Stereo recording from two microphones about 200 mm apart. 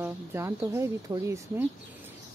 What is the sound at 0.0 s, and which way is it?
Speech, 10° right (ahead or behind).